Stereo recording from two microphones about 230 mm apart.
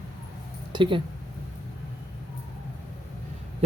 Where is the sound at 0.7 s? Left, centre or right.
Right.